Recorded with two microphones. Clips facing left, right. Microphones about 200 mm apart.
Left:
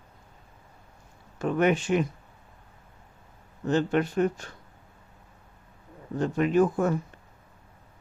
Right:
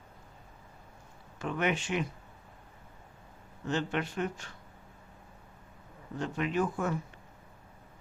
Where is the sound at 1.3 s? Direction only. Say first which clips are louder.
Left 8 dB; 45° left (ahead or behind).